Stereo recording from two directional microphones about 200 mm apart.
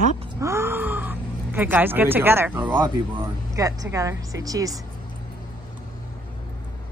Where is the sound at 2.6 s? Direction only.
25° right (ahead or behind).